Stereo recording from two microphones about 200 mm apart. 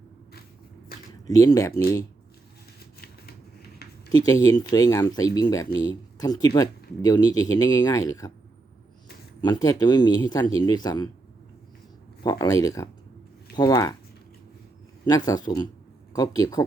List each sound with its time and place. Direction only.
1.3 s speech: 15° left (ahead or behind)
3.0 s scissors: 50° left (ahead or behind)
4.3 s speech: 15° left (ahead or behind)
9.4 s speech: 20° left (ahead or behind)
12.2 s speech: 20° left (ahead or behind)
15.0 s speech: 20° left (ahead or behind)